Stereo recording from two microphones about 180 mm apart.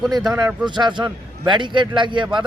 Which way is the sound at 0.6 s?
25° right (ahead or behind).